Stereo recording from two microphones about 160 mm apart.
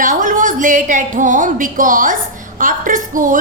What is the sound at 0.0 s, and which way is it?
A woman's voice, 55° right (ahead or behind).